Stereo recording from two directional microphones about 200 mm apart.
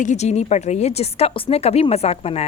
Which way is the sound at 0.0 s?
35° left (ahead or behind).